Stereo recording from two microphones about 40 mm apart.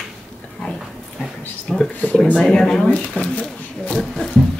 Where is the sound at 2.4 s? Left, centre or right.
Centre.